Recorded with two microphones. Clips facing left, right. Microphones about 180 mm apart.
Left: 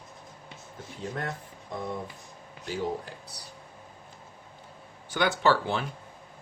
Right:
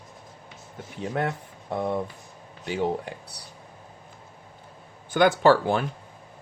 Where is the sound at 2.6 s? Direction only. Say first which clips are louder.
Right 5 dB; 65° right (ahead or behind).